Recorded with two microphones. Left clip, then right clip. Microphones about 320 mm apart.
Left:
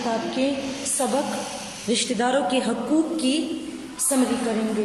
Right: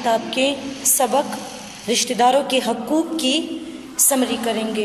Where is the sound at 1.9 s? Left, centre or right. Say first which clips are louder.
Right 6 dB; centre.